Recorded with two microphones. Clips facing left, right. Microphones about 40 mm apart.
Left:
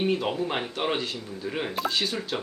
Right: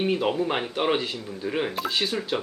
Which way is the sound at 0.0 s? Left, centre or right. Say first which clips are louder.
Right 2 dB; centre.